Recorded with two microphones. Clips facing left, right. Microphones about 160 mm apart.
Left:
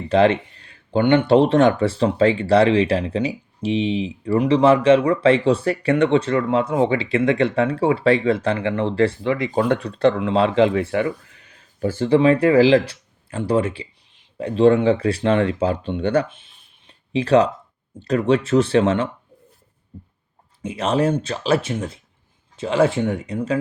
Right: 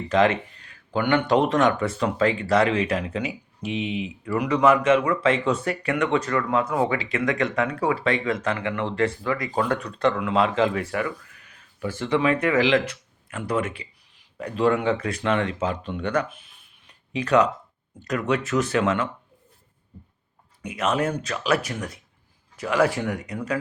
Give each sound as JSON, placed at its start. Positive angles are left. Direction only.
{"t": 0.1, "sound": "speech", "side_deg": 30}
{"t": 20.6, "sound": "speech", "side_deg": 30}